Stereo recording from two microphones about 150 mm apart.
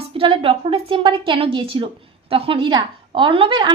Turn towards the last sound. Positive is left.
turn(degrees=-30)  # may be behind; listen again after turning